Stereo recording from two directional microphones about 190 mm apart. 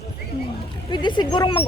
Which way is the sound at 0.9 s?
25° left (ahead or behind).